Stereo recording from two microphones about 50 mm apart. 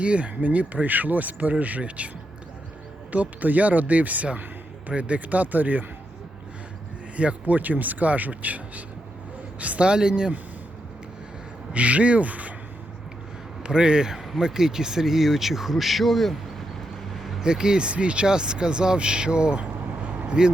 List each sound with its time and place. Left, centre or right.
0.0 s speech: right
3.1 s speech: right
7.2 s speech: right
11.7 s speech: right
13.6 s speech: centre
17.4 s speech: centre
20.0 s vehicle: right